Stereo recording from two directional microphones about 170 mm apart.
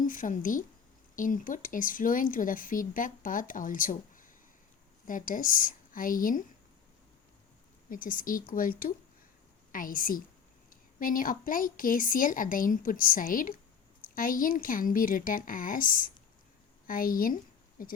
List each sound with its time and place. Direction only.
0.0 s speech: 50° left (ahead or behind)
7.9 s a woman's voice: 55° left (ahead or behind)